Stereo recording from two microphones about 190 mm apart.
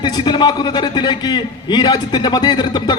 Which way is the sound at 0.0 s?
25° left (ahead or behind).